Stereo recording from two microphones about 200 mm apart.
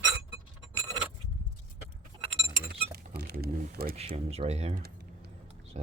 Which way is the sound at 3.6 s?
50° right (ahead or behind).